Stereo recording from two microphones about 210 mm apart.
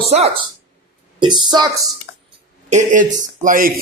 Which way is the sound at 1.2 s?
20° right (ahead or behind).